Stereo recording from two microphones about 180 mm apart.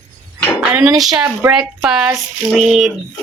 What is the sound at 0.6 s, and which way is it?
Speech, 5° right (ahead or behind).